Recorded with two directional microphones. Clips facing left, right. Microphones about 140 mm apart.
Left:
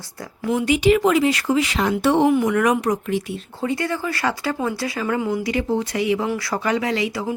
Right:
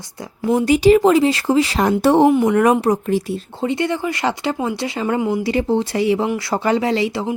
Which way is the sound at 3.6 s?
25° right (ahead or behind).